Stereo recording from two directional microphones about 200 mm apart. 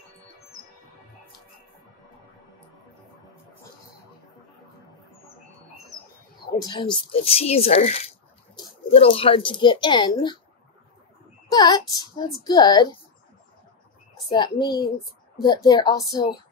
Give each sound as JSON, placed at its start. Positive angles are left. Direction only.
{"t": 6.6, "sound": "speech", "side_deg": 20}
{"t": 11.5, "sound": "a woman's voice", "side_deg": 20}
{"t": 14.1, "sound": "a child's voice", "side_deg": 20}